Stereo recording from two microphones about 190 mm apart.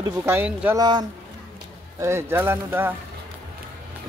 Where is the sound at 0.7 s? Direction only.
20° right (ahead or behind).